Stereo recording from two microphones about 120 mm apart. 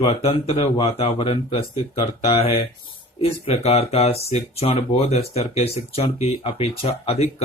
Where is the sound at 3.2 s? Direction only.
55° left (ahead or behind).